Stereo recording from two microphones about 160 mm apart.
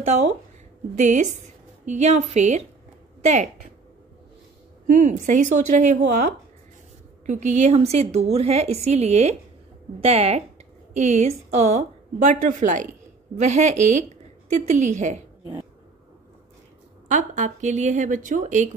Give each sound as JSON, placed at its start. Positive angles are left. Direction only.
{"t": 0.0, "sound": "a woman's voice", "side_deg": -45}
{"t": 4.8, "sound": "a woman's voice", "side_deg": -50}
{"t": 17.1, "sound": "a woman's voice", "side_deg": -50}